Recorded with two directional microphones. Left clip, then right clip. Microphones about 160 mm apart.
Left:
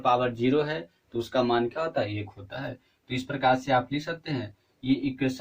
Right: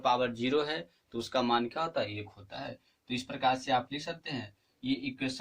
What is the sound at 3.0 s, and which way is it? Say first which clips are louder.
Speech: left 6 dB; 25° right (ahead or behind).